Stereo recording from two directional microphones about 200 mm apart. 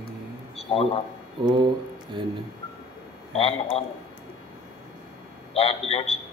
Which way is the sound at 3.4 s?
25° left (ahead or behind).